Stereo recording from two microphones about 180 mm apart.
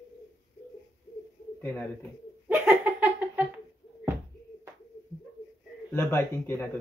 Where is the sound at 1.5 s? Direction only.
10° left (ahead or behind).